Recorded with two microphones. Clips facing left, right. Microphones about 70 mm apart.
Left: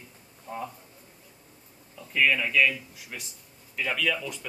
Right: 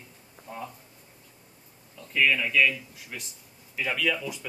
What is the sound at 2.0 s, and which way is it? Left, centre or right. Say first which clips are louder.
Speech: even; centre.